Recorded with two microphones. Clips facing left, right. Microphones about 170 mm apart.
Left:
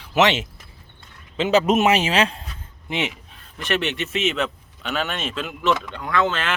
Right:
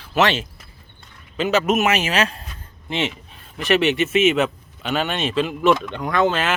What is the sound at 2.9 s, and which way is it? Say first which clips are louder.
Speech: right 2 dB; 15° left (ahead or behind).